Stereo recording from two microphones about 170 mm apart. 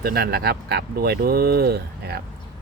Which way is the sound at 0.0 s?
65° right (ahead or behind).